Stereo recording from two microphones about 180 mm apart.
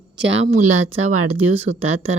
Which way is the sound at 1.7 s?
75° right (ahead or behind).